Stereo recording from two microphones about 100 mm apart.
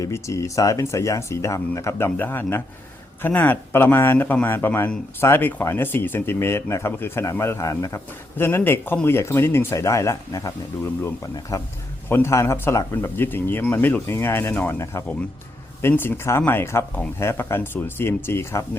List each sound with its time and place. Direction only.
0.0 s speech: 30° left (ahead or behind)
11.5 s speech: 35° left (ahead or behind)
12.0 s speech: 25° left (ahead or behind)
15.8 s speech: 20° left (ahead or behind)